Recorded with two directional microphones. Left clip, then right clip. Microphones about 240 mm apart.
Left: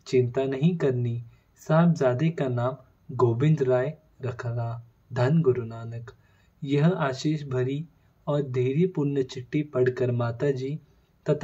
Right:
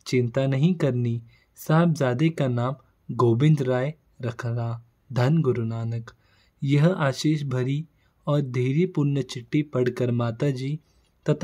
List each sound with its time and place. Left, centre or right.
0.0 s speech: right